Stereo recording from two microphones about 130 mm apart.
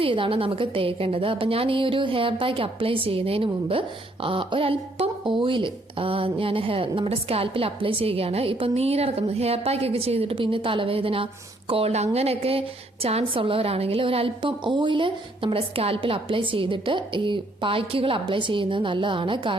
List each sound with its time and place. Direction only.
0.0 s a woman's voice: 45° right (ahead or behind)